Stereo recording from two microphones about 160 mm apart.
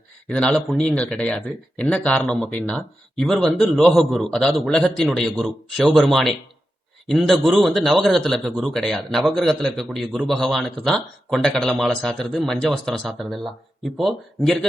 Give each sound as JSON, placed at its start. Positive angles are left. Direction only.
{"t": 0.3, "sound": "speech", "side_deg": 5}